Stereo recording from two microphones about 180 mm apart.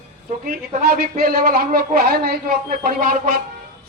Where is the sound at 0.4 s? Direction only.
55° right (ahead or behind).